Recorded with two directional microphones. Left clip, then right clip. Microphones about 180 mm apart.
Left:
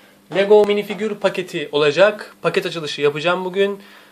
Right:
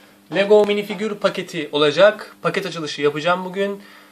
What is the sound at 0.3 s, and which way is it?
Speech, 15° left (ahead or behind).